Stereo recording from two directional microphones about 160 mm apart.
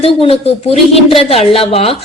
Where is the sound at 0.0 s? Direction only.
35° left (ahead or behind).